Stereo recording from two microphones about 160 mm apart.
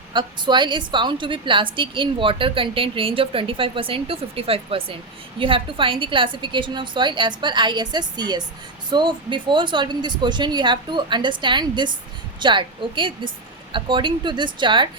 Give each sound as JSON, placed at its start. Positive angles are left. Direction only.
{"t": 0.1, "sound": "a woman's voice", "side_deg": -30}